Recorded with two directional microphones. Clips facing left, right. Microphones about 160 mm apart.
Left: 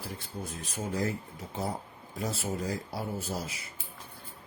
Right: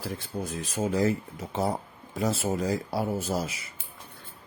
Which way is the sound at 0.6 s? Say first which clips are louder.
Right 7 dB; 90° right.